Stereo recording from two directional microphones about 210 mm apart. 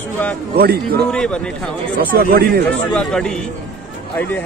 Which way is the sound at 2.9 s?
5° left (ahead or behind).